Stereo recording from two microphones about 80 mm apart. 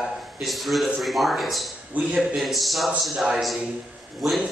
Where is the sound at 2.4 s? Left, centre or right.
Centre.